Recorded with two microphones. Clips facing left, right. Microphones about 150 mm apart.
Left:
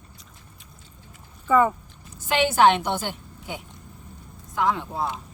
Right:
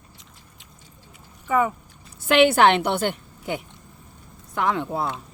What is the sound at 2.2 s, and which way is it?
A woman's voice, 65° right (ahead or behind).